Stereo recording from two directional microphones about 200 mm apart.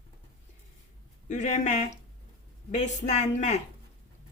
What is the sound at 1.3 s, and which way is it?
A woman's voice, 35° left (ahead or behind).